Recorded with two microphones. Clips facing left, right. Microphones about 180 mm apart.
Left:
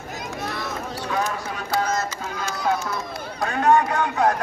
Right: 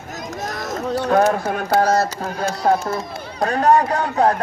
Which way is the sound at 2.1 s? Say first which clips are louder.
Right 6 dB; 55° right (ahead or behind).